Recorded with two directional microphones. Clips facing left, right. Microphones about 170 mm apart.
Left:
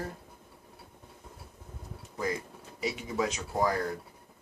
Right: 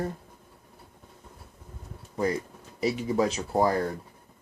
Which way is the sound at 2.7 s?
35° right (ahead or behind).